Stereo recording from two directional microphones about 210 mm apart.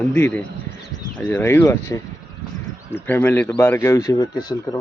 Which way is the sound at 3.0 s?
10° left (ahead or behind).